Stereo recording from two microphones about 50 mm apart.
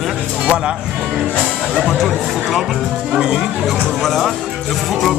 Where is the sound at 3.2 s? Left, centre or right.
Centre.